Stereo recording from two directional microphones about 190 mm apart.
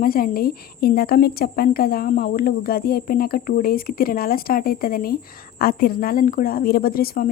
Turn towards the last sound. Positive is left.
turn(degrees=50)  # may be behind; listen again after turning